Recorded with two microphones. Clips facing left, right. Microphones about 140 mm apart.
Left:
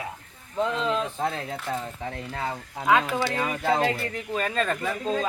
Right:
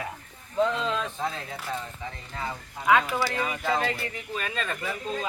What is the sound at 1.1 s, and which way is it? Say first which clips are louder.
Speech: left 3 dB; 55° left (ahead or behind).